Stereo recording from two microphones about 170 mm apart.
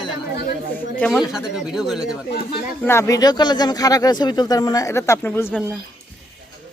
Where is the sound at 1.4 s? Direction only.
5° right (ahead or behind).